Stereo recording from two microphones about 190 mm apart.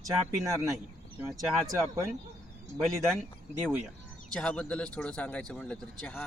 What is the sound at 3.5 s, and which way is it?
Speech, 15° right (ahead or behind).